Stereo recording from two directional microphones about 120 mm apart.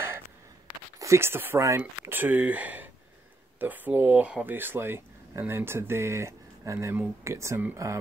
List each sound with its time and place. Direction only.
0.9 s speech: 25° right (ahead or behind)